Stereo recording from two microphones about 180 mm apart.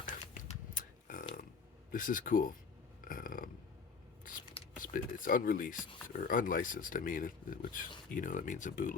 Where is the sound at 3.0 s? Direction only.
50° left (ahead or behind).